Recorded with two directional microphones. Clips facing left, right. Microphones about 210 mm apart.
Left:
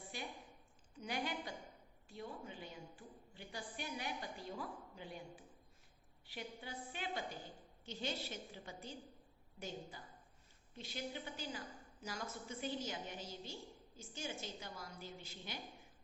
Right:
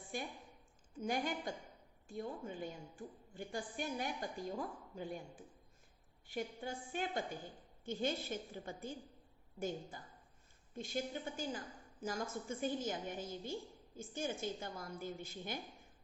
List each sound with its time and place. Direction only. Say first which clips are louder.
0.1 s a woman's voice: right 6 dB; 50° right (ahead or behind)